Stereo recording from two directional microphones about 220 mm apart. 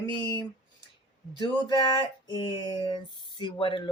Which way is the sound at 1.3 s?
20° left (ahead or behind).